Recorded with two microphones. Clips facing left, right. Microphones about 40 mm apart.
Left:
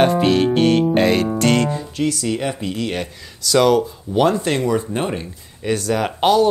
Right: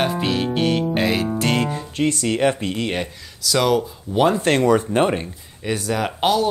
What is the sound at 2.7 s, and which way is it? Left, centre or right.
Speech, right.